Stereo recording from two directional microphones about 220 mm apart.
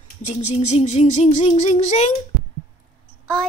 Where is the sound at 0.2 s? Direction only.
30° left (ahead or behind).